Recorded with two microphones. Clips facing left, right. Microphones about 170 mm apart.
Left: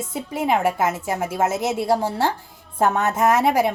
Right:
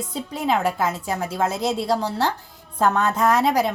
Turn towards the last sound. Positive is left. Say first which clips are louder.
# left 1 dB
turn(degrees=20)  # may be behind; listen again after turning